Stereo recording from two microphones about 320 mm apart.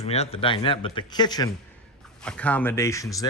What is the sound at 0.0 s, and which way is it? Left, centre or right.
Speech, centre.